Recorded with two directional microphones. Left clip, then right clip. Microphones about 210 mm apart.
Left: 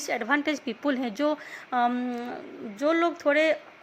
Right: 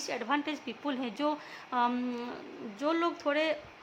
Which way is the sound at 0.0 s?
20° left (ahead or behind).